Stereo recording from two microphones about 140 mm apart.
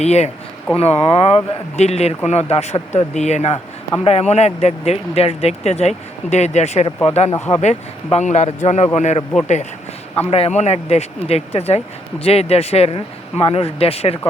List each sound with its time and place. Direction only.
0.0 s speech: 50° left (ahead or behind)
7.3 s speech: 15° left (ahead or behind)
7.6 s speech: 55° left (ahead or behind)
10.2 s speech: 45° left (ahead or behind)